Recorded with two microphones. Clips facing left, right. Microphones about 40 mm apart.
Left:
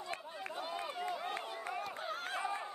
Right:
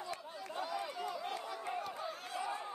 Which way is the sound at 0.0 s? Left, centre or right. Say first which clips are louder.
Left 1 dB; left.